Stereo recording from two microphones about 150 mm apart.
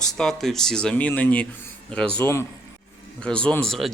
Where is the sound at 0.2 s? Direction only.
Centre (ahead or behind).